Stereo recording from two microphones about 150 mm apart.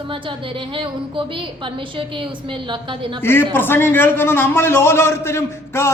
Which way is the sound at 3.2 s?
15° left (ahead or behind).